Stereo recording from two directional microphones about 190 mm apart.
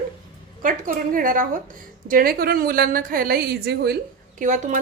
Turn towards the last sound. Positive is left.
turn(degrees=-40)  # may be behind; listen again after turning